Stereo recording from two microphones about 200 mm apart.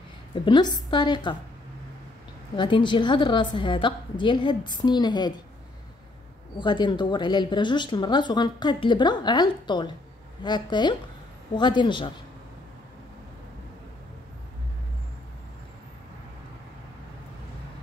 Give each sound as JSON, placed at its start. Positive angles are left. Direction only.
{"t": 0.3, "sound": "speech", "side_deg": 20}
{"t": 2.5, "sound": "speech", "side_deg": 25}
{"t": 6.6, "sound": "speech", "side_deg": 20}